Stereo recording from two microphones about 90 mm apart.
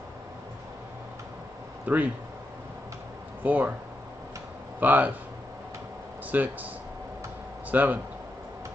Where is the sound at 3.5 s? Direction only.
20° right (ahead or behind).